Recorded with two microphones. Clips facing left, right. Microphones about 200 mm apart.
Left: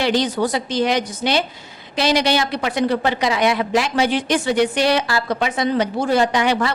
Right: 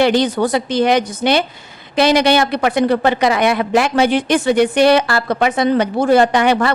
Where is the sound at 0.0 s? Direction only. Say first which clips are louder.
Right 5 dB; 55° right (ahead or behind).